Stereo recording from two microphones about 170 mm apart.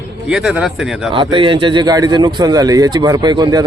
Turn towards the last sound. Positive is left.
turn(degrees=-25)  # may be behind; listen again after turning